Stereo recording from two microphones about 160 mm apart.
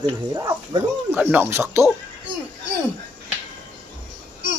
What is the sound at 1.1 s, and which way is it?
Speech, 10° right (ahead or behind).